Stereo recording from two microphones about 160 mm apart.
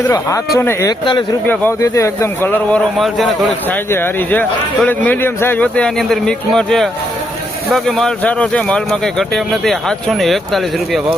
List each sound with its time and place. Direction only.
0.1 s speech: 20° left (ahead or behind)
3.0 s speech: centre (ahead or behind)
3.9 s speech: 10° left (ahead or behind)